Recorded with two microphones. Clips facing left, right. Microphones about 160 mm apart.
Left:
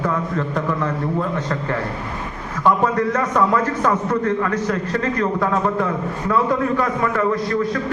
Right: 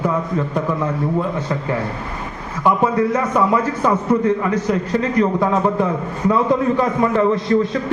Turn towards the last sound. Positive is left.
turn(degrees=-25)  # may be behind; listen again after turning